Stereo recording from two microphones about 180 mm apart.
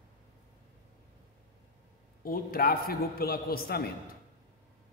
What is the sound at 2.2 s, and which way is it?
A man's voice, 55° left (ahead or behind).